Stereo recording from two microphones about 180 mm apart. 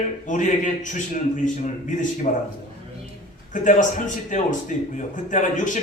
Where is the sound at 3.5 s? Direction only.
45° left (ahead or behind).